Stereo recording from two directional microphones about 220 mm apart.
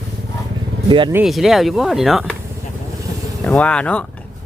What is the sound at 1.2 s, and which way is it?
Speech, centre (ahead or behind).